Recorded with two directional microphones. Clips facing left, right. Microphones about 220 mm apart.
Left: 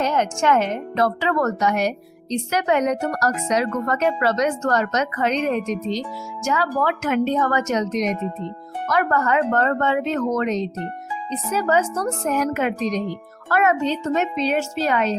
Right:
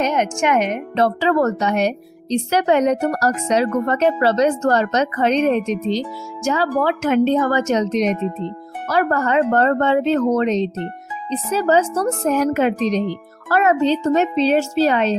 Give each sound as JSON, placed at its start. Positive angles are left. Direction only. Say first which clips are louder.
{"t": 0.0, "sound": "a woman's voice", "louder": "right 2 dB", "side_deg": -20}
{"t": 0.9, "sound": "a woman's voice", "louder": "right 4 dB", "side_deg": -30}